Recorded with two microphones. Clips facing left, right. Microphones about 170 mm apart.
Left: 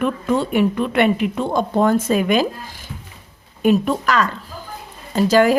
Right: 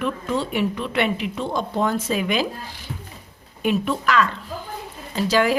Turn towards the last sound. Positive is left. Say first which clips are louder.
# left 5 dB
turn(degrees=45)  # may be behind; listen again after turning